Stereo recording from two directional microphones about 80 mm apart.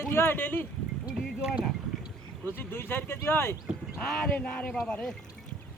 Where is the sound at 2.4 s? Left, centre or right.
Left.